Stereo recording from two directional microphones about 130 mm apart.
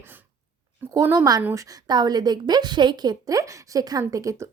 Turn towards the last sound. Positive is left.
turn(degrees=-25)  # may be behind; listen again after turning